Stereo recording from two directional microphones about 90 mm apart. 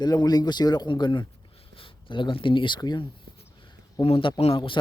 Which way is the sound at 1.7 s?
70° left (ahead or behind).